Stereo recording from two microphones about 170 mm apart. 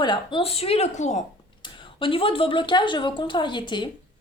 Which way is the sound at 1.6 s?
30° left (ahead or behind).